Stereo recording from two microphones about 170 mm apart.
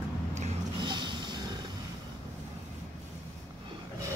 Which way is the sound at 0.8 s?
25° right (ahead or behind).